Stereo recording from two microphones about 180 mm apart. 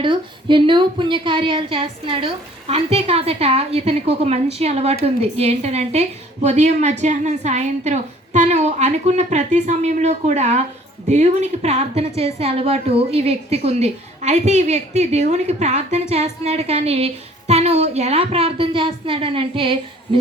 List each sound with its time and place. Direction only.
0.0 s a woman's voice: 25° right (ahead or behind)